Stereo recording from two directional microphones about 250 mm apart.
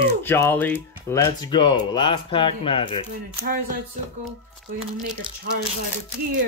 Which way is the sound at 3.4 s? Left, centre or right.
Right.